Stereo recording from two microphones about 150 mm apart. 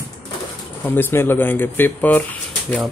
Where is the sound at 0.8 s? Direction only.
15° left (ahead or behind).